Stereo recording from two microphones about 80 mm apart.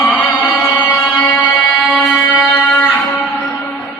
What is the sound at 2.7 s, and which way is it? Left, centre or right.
Guitar, left.